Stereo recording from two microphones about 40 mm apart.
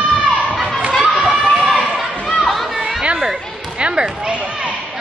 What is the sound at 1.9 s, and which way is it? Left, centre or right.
Chatter, centre.